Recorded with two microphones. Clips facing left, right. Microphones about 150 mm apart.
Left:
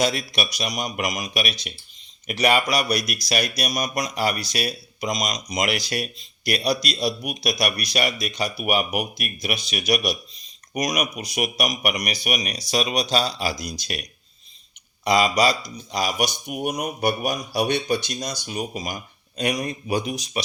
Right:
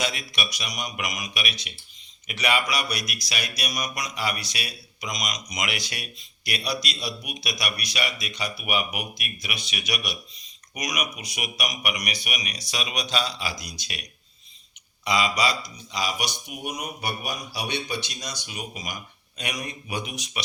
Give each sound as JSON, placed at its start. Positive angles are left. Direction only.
{"t": 0.0, "sound": "speech", "side_deg": 35}
{"t": 15.0, "sound": "speech", "side_deg": 40}